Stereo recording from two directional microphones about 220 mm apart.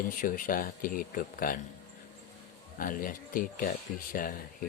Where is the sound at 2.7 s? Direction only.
40° left (ahead or behind).